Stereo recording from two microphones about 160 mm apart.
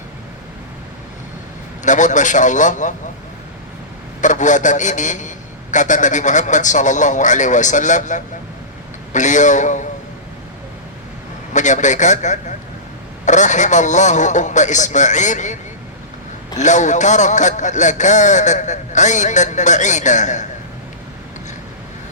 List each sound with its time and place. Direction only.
1.8 s a man's voice: 50° left (ahead or behind)
4.2 s a man's voice: 50° left (ahead or behind)
11.5 s a man's voice: 50° left (ahead or behind)
16.6 s a man's voice: 50° left (ahead or behind)